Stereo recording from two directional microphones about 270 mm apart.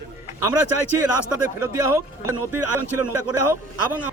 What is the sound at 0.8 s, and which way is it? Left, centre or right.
Speech, right.